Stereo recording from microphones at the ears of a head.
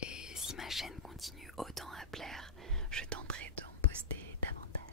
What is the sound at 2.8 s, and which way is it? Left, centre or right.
Whispering, right.